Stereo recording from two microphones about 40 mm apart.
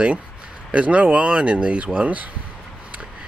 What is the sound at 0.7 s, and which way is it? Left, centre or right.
Speech, right.